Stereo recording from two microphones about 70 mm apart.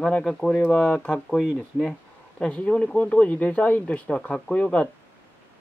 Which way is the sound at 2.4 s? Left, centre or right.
Centre.